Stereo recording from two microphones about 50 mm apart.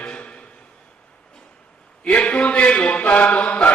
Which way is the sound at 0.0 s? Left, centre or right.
Left.